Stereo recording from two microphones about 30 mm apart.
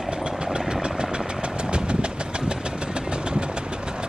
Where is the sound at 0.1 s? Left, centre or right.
Right.